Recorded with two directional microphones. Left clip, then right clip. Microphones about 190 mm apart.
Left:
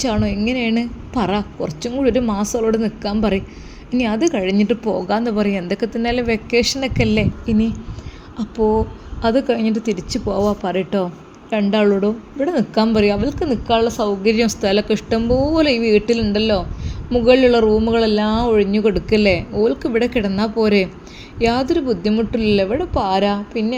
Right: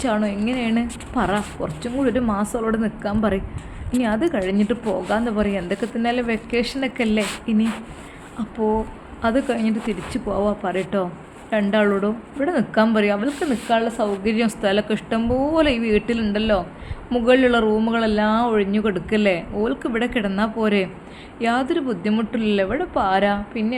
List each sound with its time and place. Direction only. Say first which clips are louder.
0.0 s a woman's voice: left 2 dB; 30° left (ahead or behind)
8.4 s a woman's voice: left 5 dB; 30° left (ahead or behind)